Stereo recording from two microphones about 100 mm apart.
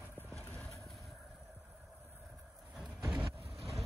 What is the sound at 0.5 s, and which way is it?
Vehicle, 15° left (ahead or behind).